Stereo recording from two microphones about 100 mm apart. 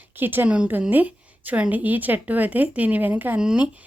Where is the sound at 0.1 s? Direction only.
20° right (ahead or behind).